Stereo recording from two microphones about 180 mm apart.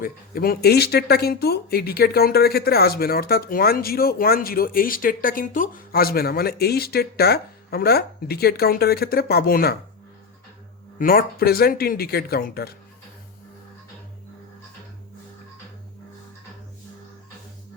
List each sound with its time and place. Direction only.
0.0 s speech: 55° left (ahead or behind)
10.9 s speech: 55° left (ahead or behind)